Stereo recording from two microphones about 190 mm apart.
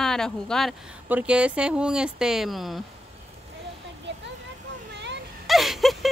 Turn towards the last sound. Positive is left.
turn(degrees=0)  # may be behind; listen again after turning